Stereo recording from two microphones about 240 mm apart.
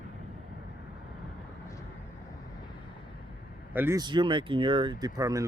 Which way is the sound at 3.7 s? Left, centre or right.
Centre.